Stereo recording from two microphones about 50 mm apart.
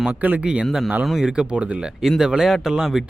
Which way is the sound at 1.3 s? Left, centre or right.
Centre.